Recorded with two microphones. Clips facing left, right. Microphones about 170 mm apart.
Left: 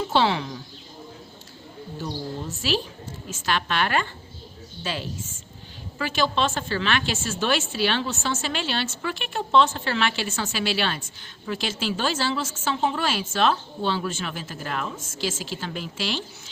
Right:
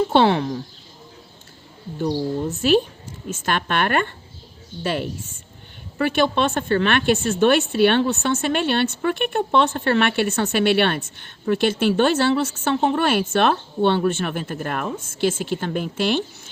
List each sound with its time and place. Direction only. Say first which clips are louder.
0.1 s speech: right 6 dB; 55° right (ahead or behind)
2.5 s a woman's voice: right 10 dB; 55° right (ahead or behind)